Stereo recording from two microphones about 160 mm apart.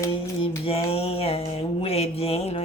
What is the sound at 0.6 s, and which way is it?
Mantra, 35° left (ahead or behind).